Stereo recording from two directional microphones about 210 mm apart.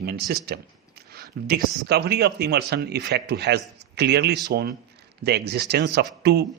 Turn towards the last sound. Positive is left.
turn(degrees=-50)  # may be behind; listen again after turning